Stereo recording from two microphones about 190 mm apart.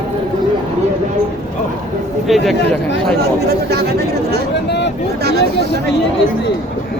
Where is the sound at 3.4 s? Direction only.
55° right (ahead or behind).